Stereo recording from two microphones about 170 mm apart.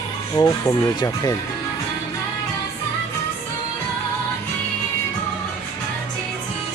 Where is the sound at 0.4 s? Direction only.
25° left (ahead or behind).